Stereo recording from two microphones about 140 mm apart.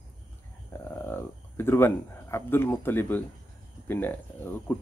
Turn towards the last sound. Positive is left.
turn(degrees=15)  # may be behind; listen again after turning